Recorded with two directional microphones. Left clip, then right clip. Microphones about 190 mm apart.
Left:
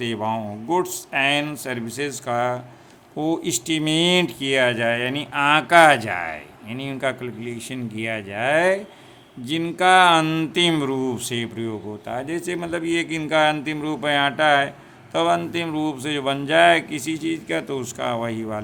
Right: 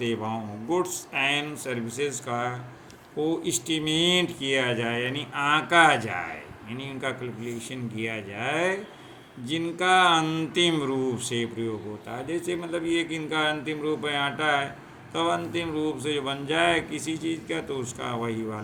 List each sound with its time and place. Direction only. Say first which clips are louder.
0.0 s speech: left 5 dB; 40° left (ahead or behind)